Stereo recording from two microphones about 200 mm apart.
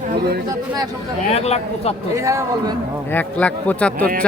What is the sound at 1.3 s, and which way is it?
Speech, 30° left (ahead or behind).